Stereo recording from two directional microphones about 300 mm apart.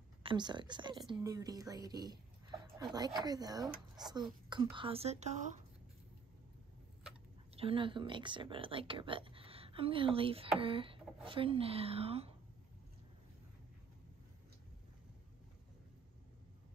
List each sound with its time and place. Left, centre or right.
0.2 s speech: centre
7.5 s speech: centre